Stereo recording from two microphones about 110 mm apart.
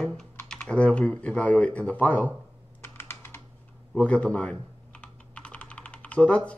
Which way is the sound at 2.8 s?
20° left (ahead or behind).